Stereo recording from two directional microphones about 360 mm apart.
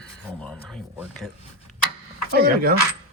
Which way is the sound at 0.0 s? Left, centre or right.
Centre.